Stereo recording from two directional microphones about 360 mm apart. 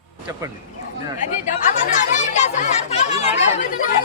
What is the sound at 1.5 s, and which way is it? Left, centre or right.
Speech, centre.